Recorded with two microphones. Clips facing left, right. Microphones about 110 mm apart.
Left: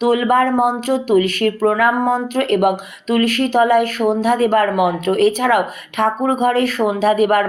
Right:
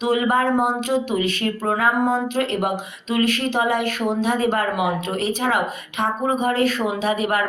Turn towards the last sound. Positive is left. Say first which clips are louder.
# left 7 dB
turn(degrees=45)  # may be behind; listen again after turning